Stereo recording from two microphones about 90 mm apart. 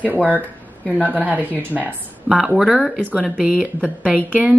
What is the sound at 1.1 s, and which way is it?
Speech, 20° right (ahead or behind).